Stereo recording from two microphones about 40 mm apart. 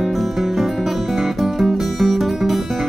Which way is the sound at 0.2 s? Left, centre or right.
Centre.